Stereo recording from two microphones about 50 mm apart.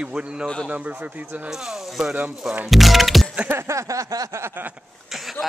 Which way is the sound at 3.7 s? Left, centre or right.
Right.